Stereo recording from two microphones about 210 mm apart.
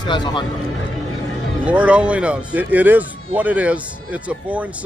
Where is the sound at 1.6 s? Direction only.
5° right (ahead or behind).